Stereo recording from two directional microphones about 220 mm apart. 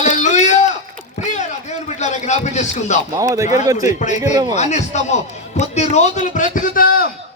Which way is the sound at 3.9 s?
35° left (ahead or behind).